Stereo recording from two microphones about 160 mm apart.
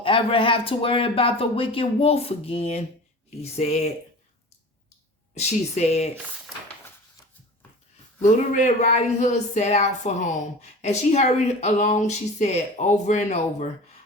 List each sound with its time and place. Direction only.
0.0 s speech: 35° left (ahead or behind)
5.3 s speech: 45° left (ahead or behind)
8.2 s speech: 50° left (ahead or behind)